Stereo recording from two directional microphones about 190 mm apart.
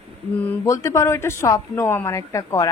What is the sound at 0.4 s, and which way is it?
Speech, 10° left (ahead or behind).